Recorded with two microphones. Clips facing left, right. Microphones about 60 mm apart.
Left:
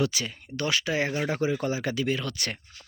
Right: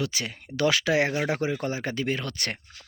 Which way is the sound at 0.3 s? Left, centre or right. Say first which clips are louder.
Right 5 dB; right.